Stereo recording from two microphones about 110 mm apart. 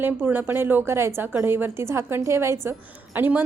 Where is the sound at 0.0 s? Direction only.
20° right (ahead or behind).